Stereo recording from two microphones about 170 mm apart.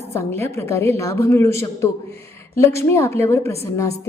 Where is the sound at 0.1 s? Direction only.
15° left (ahead or behind).